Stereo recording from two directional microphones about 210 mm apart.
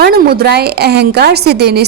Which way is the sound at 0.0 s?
50° right (ahead or behind).